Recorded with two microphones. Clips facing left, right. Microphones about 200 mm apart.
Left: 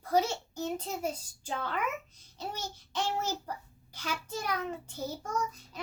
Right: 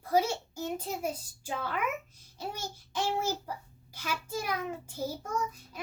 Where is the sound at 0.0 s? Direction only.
10° right (ahead or behind).